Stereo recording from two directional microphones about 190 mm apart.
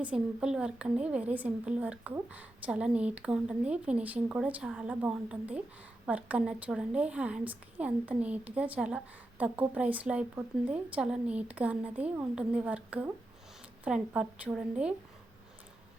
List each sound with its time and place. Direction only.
0.0 s a woman's voice: 5° right (ahead or behind)